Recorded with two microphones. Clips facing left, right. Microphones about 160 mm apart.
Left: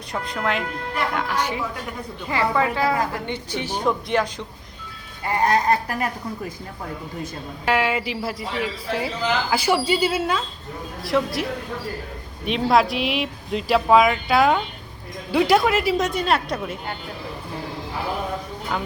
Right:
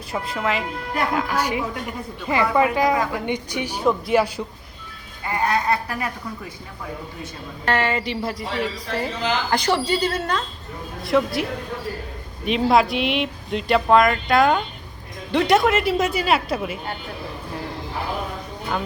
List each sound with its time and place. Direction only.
0.1 s speech: 5° right (ahead or behind)
2.3 s a woman's voice: 15° right (ahead or behind)
5.2 s speech: 40° left (ahead or behind)
7.6 s speech: 10° left (ahead or behind)
12.5 s speech: centre (ahead or behind)